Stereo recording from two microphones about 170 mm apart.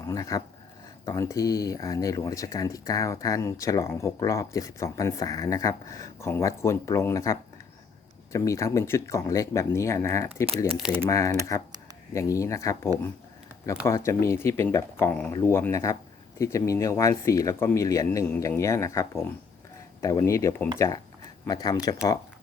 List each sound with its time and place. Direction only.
0.0 s speech: 20° left (ahead or behind)
10.8 s speech: 5° right (ahead or behind)
11.0 s speech: 20° left (ahead or behind)